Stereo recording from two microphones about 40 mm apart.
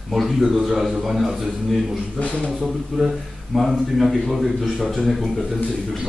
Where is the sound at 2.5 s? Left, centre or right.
Centre.